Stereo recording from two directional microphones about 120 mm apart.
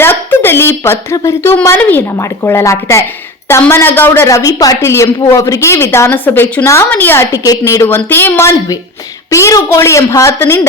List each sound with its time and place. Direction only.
0.0 s a woman's voice: 20° left (ahead or behind)
7.4 s a woman's voice: 30° left (ahead or behind)